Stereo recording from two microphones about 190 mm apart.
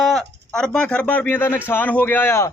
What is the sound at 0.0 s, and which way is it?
Speech, centre (ahead or behind).